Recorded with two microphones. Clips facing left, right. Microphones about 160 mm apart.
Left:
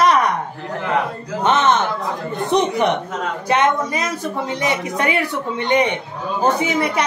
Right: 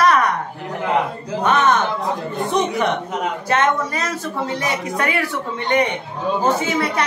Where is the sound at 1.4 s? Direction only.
20° left (ahead or behind).